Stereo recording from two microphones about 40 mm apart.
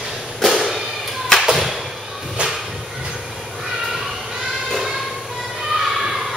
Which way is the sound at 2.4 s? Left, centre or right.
Right.